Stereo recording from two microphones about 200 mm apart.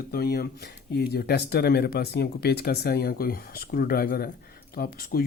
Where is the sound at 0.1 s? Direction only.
50° left (ahead or behind).